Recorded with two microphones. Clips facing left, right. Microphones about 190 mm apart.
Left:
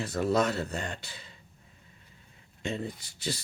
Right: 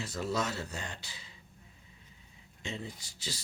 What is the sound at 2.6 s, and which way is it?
Speech, 55° left (ahead or behind).